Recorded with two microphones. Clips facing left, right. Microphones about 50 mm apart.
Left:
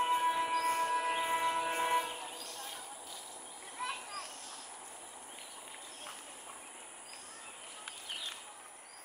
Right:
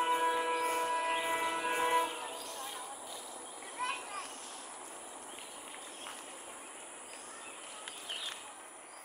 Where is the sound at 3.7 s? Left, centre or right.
Right.